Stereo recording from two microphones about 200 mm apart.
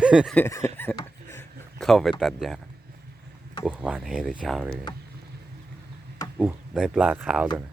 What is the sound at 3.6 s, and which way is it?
Speech, 5° right (ahead or behind).